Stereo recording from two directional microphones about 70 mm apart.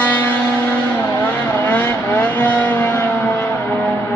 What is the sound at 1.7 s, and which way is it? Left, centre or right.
Vehicle, left.